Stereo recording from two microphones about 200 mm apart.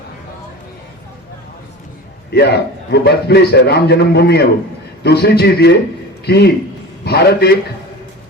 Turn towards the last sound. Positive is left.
turn(degrees=55)  # may be behind; listen again after turning